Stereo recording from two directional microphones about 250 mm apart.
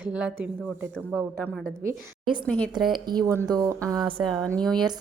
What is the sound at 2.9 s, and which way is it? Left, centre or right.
A woman's voice, centre.